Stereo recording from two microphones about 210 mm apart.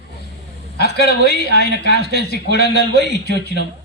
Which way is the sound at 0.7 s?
50° left (ahead or behind).